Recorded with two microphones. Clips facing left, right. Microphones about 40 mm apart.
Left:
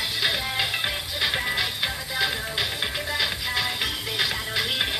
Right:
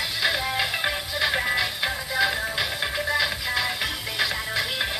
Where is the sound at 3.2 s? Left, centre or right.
Centre.